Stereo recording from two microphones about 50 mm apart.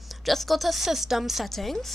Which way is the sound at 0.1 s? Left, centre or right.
Centre.